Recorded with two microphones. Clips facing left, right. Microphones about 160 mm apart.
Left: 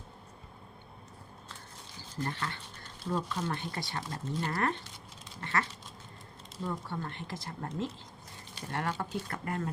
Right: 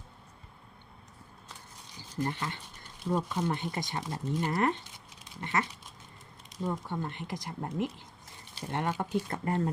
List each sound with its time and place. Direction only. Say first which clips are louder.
2.0 s speech: right 3 dB; 15° right (ahead or behind)
5.4 s a sound: right 2 dB; 15° right (ahead or behind)
6.6 s speech: right 3 dB; 20° right (ahead or behind)